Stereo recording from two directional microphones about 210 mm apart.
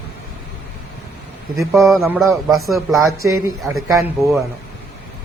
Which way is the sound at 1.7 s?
Centre (ahead or behind).